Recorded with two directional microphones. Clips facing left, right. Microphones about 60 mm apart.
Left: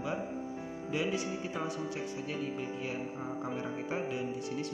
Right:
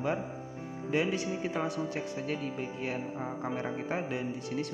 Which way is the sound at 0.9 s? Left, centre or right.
Right.